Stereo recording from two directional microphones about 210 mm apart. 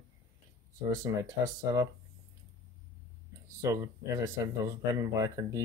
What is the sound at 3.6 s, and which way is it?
Speech, 15° right (ahead or behind).